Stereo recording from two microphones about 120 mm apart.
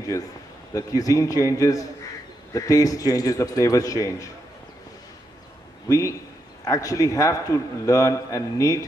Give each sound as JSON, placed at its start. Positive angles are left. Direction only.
{"t": 0.7, "sound": "a man's voice", "side_deg": 30}
{"t": 5.9, "sound": "a man's voice", "side_deg": 25}